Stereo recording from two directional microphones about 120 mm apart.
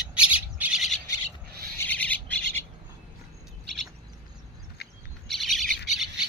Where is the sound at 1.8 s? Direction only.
10° left (ahead or behind).